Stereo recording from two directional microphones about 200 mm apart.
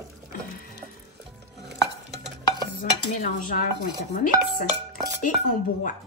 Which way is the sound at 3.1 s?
40° left (ahead or behind).